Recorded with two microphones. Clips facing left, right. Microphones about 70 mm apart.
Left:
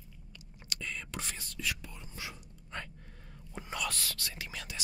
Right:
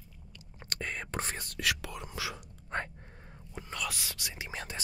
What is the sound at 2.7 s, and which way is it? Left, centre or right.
Gasp, right.